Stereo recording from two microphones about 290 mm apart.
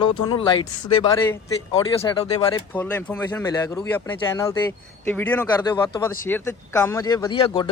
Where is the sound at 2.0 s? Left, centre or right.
Centre.